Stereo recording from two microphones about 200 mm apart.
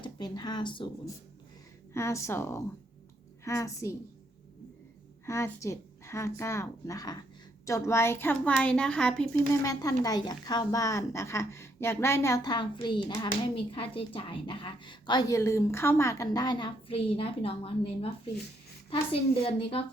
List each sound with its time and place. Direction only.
0.0 s speech: 20° left (ahead or behind)
5.2 s speech: 15° left (ahead or behind)
9.6 s a woman's voice: 15° left (ahead or behind)